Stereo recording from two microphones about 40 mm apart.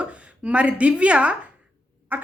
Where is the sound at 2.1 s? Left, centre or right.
Right.